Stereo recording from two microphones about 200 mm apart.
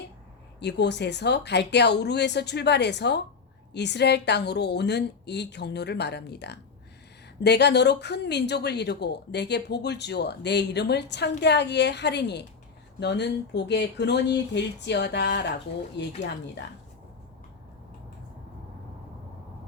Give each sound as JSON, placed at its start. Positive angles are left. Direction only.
{"t": 0.6, "sound": "speech", "side_deg": 60}